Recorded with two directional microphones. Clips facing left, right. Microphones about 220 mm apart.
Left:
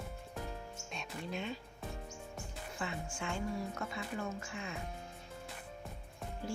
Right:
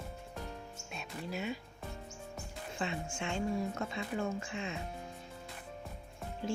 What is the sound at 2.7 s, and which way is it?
Speech, 25° right (ahead or behind).